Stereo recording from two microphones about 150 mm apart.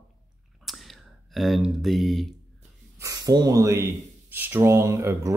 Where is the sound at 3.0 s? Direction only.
25° right (ahead or behind).